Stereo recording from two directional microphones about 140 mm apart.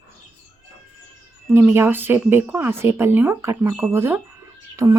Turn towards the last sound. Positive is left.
turn(degrees=-25)  # may be behind; listen again after turning